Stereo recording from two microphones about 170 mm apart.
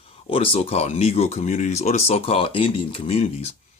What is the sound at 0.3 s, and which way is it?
Speech, 35° left (ahead or behind).